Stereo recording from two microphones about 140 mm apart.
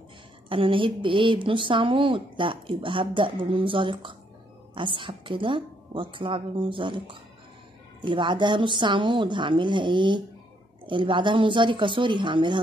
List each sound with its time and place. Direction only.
0.5 s a woman's voice: 40° right (ahead or behind)